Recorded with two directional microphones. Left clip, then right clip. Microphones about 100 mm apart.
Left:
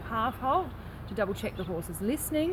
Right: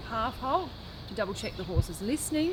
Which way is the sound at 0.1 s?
25° right (ahead or behind).